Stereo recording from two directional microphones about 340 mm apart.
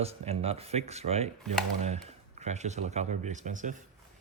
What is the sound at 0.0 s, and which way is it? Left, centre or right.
Speech, centre.